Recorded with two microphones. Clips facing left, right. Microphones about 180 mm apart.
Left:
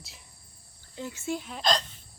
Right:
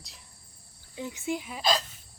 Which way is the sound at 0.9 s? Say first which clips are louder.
Right 1 dB; 15° right (ahead or behind).